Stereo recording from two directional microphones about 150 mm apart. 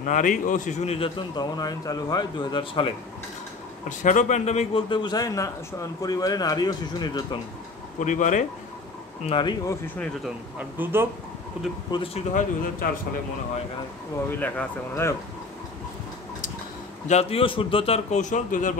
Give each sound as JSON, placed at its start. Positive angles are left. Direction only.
{"t": 0.0, "sound": "a man's voice", "side_deg": 60}
{"t": 4.0, "sound": "a man's voice", "side_deg": 55}
{"t": 4.8, "sound": "a man's voice", "side_deg": 30}
{"t": 8.0, "sound": "speech", "side_deg": 55}
{"t": 9.2, "sound": "a man's voice", "side_deg": 35}
{"t": 10.6, "sound": "speech", "side_deg": -15}
{"t": 11.9, "sound": "a man's voice", "side_deg": 40}
{"t": 14.4, "sound": "speech", "side_deg": 15}
{"t": 17.1, "sound": "a man's voice", "side_deg": 40}